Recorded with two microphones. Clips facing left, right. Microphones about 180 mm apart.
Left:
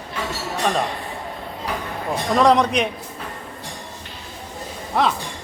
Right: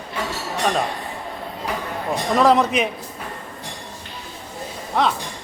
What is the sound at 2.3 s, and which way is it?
Speech, 5° right (ahead or behind).